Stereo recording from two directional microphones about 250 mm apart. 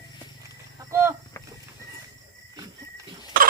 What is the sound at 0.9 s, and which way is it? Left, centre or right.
Speech, centre.